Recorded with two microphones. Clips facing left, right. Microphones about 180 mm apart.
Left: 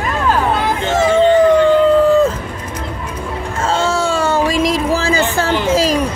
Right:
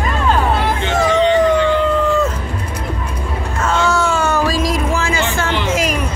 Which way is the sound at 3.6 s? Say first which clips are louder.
Even; 30° left (ahead or behind).